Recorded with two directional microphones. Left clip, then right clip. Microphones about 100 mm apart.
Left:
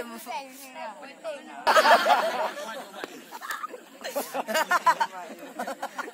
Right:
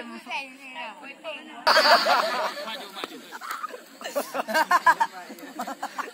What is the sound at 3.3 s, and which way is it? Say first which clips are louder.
Speech: even; 20° right (ahead or behind).